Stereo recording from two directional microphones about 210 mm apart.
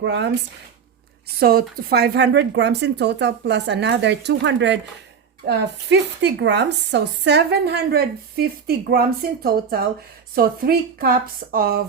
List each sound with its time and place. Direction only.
0.0 s speech: 55° right (ahead or behind)
1.4 s speech: 45° right (ahead or behind)